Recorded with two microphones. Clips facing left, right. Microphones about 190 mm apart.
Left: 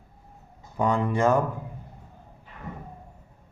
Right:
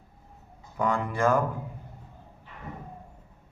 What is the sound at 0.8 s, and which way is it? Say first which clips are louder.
Speech: left 3 dB; 20° left (ahead or behind).